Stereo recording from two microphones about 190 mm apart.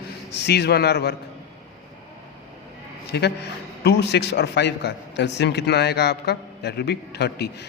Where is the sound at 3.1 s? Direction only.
60° left (ahead or behind).